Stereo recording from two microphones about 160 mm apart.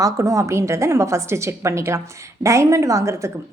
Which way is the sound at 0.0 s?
20° right (ahead or behind).